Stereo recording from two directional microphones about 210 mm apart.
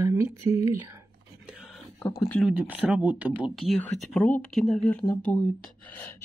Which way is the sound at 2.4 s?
5° right (ahead or behind).